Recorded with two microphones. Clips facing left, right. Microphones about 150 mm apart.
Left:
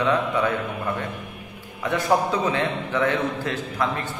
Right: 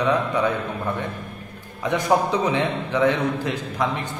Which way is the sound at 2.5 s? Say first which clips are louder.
Right 2 dB; 15° right (ahead or behind).